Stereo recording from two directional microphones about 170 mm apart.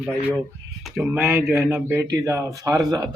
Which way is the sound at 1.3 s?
15° right (ahead or behind).